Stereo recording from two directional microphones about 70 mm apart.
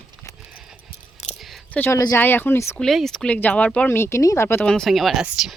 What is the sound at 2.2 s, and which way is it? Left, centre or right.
Speech, left.